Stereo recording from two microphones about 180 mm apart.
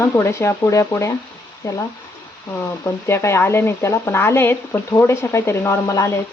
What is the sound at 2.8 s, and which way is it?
Speech, 15° left (ahead or behind).